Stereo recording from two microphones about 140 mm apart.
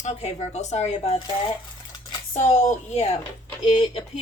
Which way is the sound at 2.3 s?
55° left (ahead or behind).